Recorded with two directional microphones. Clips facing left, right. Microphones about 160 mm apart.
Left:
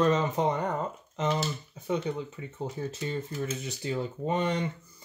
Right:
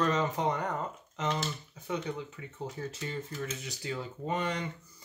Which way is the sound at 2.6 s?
25° left (ahead or behind).